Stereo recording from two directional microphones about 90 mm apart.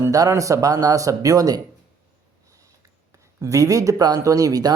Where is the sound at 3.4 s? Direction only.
40° right (ahead or behind).